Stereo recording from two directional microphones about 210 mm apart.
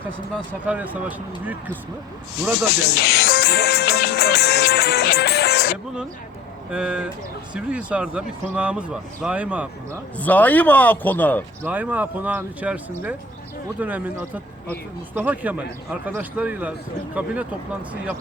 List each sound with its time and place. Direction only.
0.6 s speech: 5° right (ahead or behind)
2.7 s music: 50° left (ahead or behind)
6.7 s speech: 5° right (ahead or behind)
10.2 s speech: 10° left (ahead or behind)
11.6 s speech: 10° right (ahead or behind)